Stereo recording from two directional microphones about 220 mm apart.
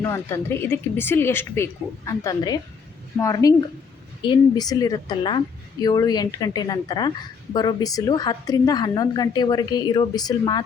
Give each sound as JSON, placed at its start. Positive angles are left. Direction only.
{"t": 0.0, "sound": "a woman's voice", "side_deg": 10}